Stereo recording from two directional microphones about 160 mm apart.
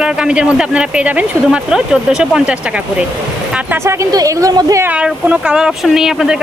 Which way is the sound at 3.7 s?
20° right (ahead or behind).